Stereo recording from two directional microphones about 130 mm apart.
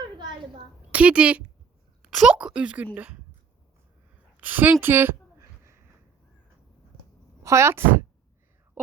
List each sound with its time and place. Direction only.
0.9 s speech: 10° right (ahead or behind)
4.4 s a sound: 15° right (ahead or behind)
7.4 s a woman's voice: 20° right (ahead or behind)